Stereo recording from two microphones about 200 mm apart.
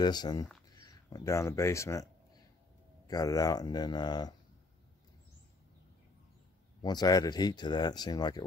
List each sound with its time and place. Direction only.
0.0 s speech: 20° left (ahead or behind)
3.1 s speech: 20° left (ahead or behind)
6.8 s speech: 20° left (ahead or behind)